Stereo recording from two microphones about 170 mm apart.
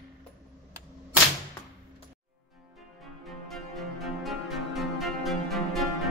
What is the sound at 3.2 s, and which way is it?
Music, centre (ahead or behind).